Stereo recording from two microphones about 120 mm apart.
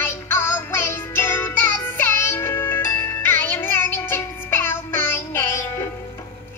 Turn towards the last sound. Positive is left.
turn(degrees=20)  # may be behind; listen again after turning